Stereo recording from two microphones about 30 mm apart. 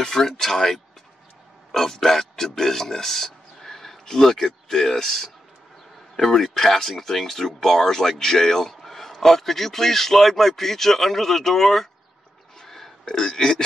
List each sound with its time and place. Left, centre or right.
0.0 s burping: centre
0.4 s speech: centre
12.5 s burping: centre
13.0 s burping: left